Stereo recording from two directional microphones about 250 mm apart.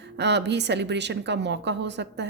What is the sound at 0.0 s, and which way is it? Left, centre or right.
A woman's voice, right.